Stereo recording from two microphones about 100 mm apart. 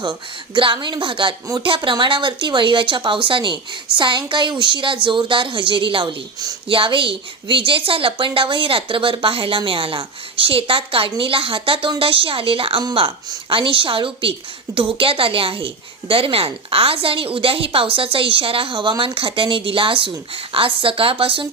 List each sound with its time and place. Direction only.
0.0 s a woman's voice: 55° right (ahead or behind)